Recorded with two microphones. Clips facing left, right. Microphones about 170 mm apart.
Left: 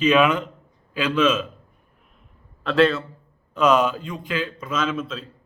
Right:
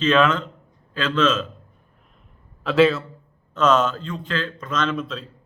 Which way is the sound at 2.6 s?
Centre (ahead or behind).